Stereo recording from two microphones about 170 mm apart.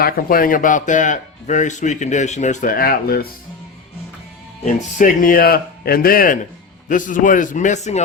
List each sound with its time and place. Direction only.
0.0 s speech: 60° left (ahead or behind)
4.6 s speech: 55° left (ahead or behind)